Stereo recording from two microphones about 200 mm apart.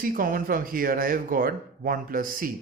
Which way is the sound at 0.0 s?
45° right (ahead or behind).